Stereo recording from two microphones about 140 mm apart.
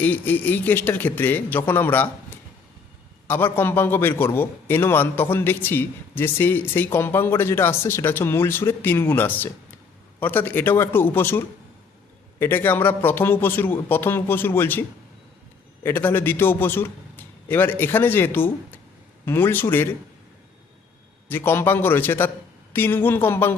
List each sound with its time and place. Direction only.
0.0 s a man's voice: 10° left (ahead or behind)
21.2 s a man's voice: 15° left (ahead or behind)